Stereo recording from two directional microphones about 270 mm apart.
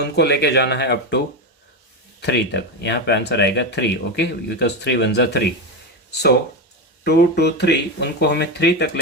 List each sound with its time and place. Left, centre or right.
0.0 s speech: left
2.2 s speech: left